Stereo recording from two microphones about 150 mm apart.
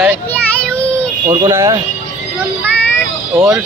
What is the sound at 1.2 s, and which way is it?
Speech, 20° right (ahead or behind).